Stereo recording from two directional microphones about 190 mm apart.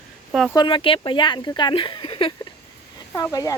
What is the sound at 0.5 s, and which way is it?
Speech, 25° left (ahead or behind).